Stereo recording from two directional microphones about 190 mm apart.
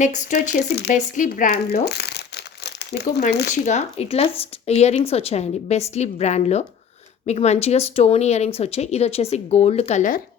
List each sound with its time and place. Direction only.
0.0 s a woman's voice: 40° left (ahead or behind)
0.5 s speech: 60° left (ahead or behind)
0.9 s speech: 40° left (ahead or behind); by 3.2 s 60° left (ahead or behind)
3.7 s a woman's voice: 35° left (ahead or behind)